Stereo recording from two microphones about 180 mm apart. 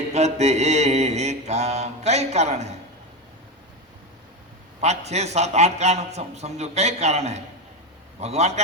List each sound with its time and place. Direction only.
0.1 s mantra: 40° right (ahead or behind)
4.8 s mantra: 40° right (ahead or behind)